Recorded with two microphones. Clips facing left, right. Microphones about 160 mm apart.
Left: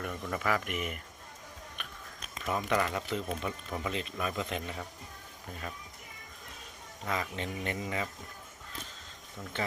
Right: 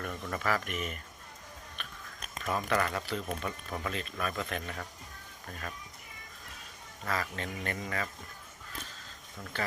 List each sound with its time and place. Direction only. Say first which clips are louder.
0.0 s speech: left 1 dB; 15° left (ahead or behind)
1.8 s biting: even; 15° left (ahead or behind)
2.4 s speech: even; 15° left (ahead or behind)
7.0 s speech: even; 20° left (ahead or behind)
9.5 s speech: left 1 dB; 20° left (ahead or behind)